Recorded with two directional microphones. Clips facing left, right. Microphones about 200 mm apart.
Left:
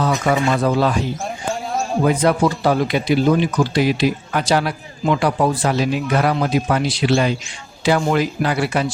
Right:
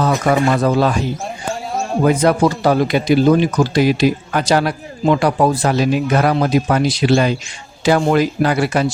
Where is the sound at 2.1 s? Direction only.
45° right (ahead or behind).